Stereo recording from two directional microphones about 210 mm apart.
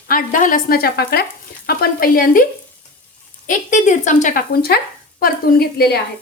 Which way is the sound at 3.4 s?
35° left (ahead or behind).